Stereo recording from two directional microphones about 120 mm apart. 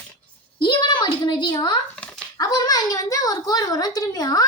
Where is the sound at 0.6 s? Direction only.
40° left (ahead or behind).